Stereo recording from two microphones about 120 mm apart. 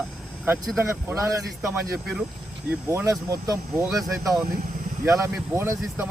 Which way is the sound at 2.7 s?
25° right (ahead or behind).